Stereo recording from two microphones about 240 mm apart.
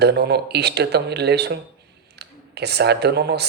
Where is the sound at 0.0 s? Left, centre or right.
Right.